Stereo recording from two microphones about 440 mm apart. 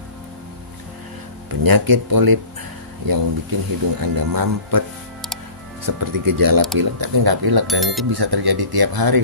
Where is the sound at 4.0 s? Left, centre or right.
Right.